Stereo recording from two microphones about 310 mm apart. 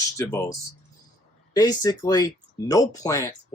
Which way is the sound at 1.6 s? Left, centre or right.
Centre.